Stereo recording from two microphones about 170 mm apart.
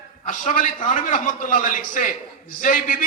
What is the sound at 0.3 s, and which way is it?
A man's voice, 50° left (ahead or behind).